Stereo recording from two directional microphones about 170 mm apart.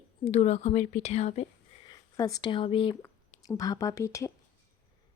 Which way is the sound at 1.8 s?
20° left (ahead or behind).